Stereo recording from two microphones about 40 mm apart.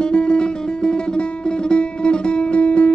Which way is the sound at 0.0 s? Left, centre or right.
Left.